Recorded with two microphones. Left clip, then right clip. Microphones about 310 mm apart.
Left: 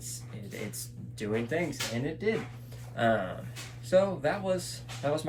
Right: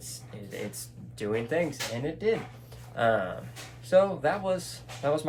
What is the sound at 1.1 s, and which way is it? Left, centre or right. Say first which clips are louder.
Speech: right 3 dB; centre.